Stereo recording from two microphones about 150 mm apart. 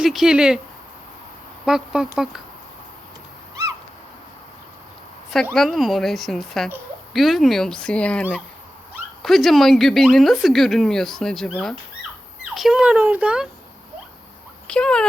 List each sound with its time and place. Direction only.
0.0 s speech: 5° right (ahead or behind)
1.6 s speech: 5° right (ahead or behind)
3.5 s owl: 20° right (ahead or behind)
5.5 s speech: centre (ahead or behind)
14.7 s speech: 5° left (ahead or behind)